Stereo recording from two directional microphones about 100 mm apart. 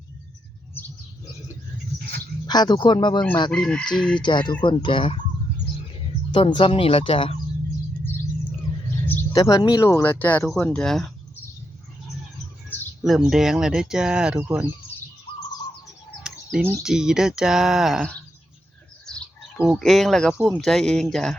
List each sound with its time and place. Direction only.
2.5 s speech: 45° left (ahead or behind)
3.5 s speech: 10° left (ahead or behind)
4.2 s speech: 50° left (ahead or behind)
6.3 s speech: 65° left (ahead or behind)
9.3 s speech: 40° left (ahead or behind); by 11.1 s 5° left (ahead or behind)
13.0 s speech: 5° right (ahead or behind)
14.3 s speech: 25° right (ahead or behind)
16.2 s bird: 10° right (ahead or behind)
16.8 s speech: 5° right (ahead or behind)
19.6 s speech: centre (ahead or behind)